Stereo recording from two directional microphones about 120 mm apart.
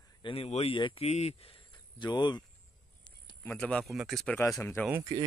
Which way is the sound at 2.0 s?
40° left (ahead or behind).